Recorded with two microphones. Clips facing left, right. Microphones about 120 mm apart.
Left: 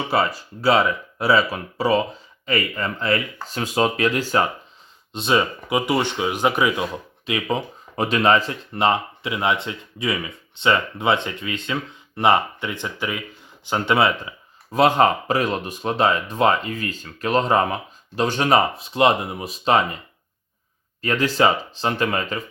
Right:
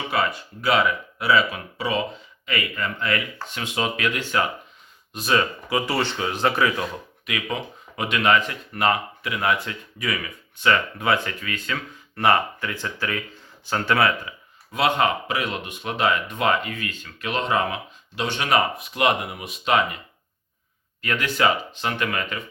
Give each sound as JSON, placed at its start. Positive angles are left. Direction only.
{"t": 0.1, "sound": "speech", "side_deg": 35}
{"t": 5.1, "sound": "speech", "side_deg": 20}
{"t": 7.3, "sound": "speech", "side_deg": 30}
{"t": 14.7, "sound": "speech", "side_deg": 35}
{"t": 21.0, "sound": "speech", "side_deg": 30}